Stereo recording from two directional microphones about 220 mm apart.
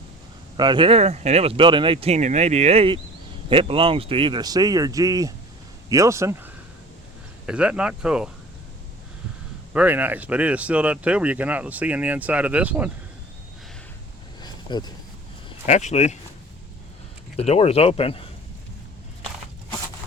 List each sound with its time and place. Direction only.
0.5 s speech: 20° right (ahead or behind); by 8.3 s 5° right (ahead or behind)
9.7 s speech: 5° right (ahead or behind)
14.4 s a sound: 20° left (ahead or behind)
15.4 s speech: 30° left (ahead or behind)
17.3 s speech: 30° left (ahead or behind)